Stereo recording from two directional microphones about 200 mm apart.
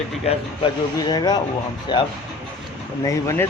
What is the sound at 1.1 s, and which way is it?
Speech, 20° left (ahead or behind).